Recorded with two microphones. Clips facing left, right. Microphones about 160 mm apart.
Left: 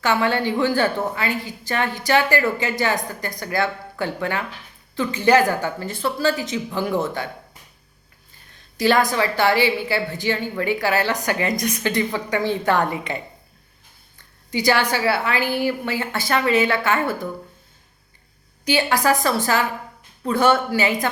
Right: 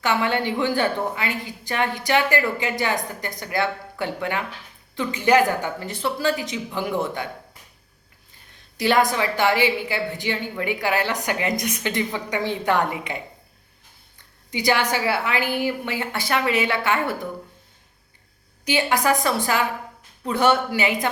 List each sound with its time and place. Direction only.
0.0 s a woman's voice: 20° right (ahead or behind)
9.1 s a woman's voice: 15° right (ahead or behind)
14.5 s a woman's voice: 20° right (ahead or behind)
18.6 s a woman's voice: 15° right (ahead or behind)